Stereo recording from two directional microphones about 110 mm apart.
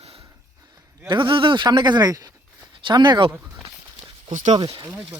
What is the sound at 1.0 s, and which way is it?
Speech, 45° right (ahead or behind).